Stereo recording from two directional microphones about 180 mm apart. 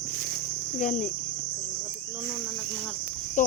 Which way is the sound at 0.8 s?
45° left (ahead or behind).